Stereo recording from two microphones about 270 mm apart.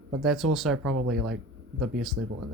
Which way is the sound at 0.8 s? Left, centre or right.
Right.